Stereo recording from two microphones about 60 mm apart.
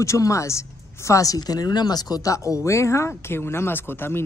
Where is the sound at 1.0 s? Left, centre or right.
Left.